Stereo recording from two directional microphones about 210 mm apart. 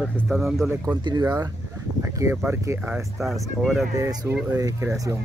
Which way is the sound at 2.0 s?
15° right (ahead or behind).